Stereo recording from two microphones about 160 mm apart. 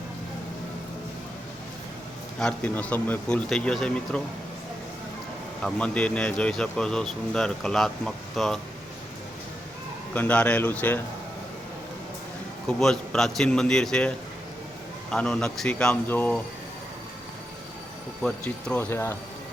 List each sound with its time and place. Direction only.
2.4 s speech: 10° left (ahead or behind)
5.6 s speech: 5° left (ahead or behind)
10.2 s speech: 10° left (ahead or behind)
12.6 s speech: 5° left (ahead or behind)
18.2 s speech: 5° left (ahead or behind)